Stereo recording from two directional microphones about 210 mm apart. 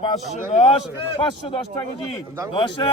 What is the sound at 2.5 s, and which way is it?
Speech, 25° left (ahead or behind).